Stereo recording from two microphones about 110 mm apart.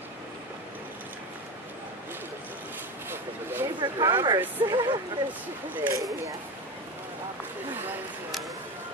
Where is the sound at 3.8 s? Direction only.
45° right (ahead or behind).